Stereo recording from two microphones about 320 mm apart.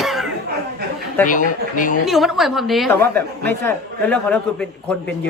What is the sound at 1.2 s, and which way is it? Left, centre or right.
Speech, left.